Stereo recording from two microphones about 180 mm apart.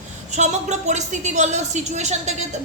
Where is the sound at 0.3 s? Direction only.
40° right (ahead or behind).